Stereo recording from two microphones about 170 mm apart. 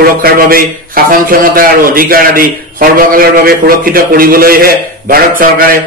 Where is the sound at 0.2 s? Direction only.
60° right (ahead or behind).